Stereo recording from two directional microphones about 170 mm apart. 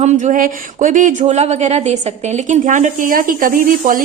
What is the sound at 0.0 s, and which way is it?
A woman's voice, 45° right (ahead or behind).